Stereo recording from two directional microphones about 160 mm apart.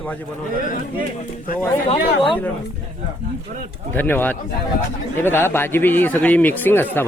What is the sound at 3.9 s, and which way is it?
A man's voice, 10° left (ahead or behind).